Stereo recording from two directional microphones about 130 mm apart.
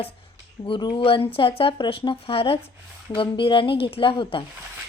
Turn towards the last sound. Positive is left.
turn(degrees=40)  # may be behind; listen again after turning